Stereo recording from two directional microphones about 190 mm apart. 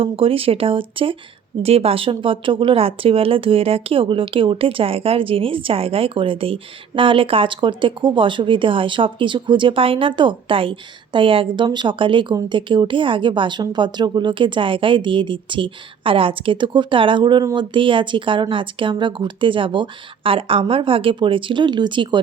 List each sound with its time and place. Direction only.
0.0 s speech: 30° right (ahead or behind)